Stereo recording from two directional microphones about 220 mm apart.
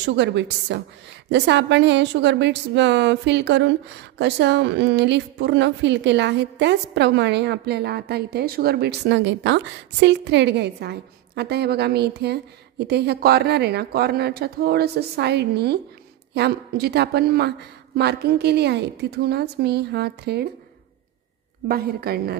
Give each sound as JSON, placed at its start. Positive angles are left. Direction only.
{"t": 0.0, "sound": "a woman's voice", "side_deg": -55}
{"t": 21.6, "sound": "a woman's voice", "side_deg": -45}